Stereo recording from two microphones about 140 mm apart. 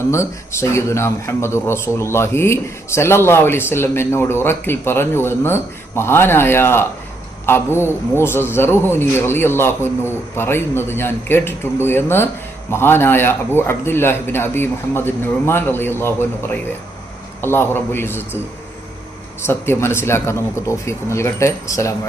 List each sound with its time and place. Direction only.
0.1 s speech: 20° left (ahead or behind)
19.4 s speech: 15° left (ahead or behind)